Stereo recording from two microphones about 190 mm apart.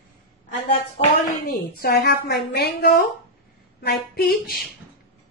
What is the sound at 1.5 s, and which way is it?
A woman's voice, 55° left (ahead or behind).